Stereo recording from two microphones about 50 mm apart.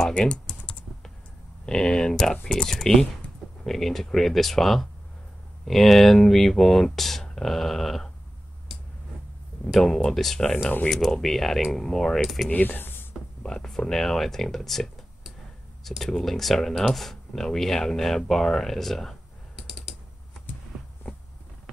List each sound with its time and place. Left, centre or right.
0.1 s typing: centre
1.7 s speech: centre
9.8 s speech: centre
10.6 s speech: left
10.9 s speech: centre
12.4 s speech: left
13.4 s a sound: centre
13.7 s speech: centre
16.0 s speech: centre
19.5 s typing: centre
20.7 s heart sounds: centre